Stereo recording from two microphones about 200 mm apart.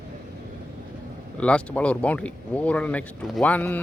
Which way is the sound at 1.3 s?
5° left (ahead or behind).